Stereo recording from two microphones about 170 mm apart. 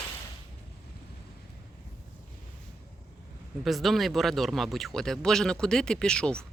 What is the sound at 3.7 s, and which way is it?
Speech, centre (ahead or behind).